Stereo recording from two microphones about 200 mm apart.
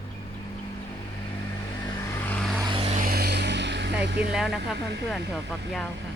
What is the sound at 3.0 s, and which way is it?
Vehicle, 50° right (ahead or behind).